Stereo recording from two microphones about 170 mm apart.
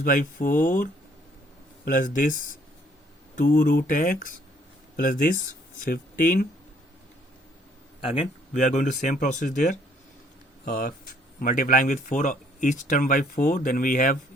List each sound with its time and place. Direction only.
0.0 s speech: 55° left (ahead or behind)
3.3 s speech: 50° left (ahead or behind)
8.0 s speech: 35° left (ahead or behind); by 14.2 s 50° left (ahead or behind)